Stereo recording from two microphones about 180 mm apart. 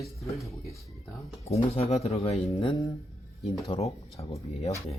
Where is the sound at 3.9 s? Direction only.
20° left (ahead or behind).